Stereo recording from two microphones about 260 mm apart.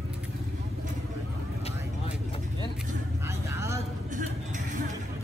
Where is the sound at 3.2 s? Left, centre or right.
Centre.